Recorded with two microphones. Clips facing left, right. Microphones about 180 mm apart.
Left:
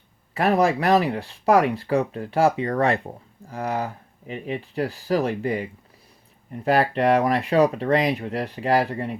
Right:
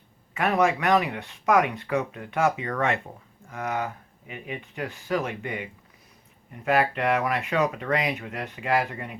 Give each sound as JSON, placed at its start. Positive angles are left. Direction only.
{"t": 0.3, "sound": "speech", "side_deg": 35}